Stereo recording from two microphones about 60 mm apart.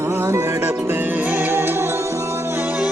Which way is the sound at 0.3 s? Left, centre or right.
Right.